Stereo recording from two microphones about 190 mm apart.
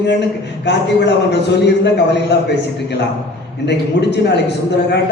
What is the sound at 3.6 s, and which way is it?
A woman's voice, 65° left (ahead or behind).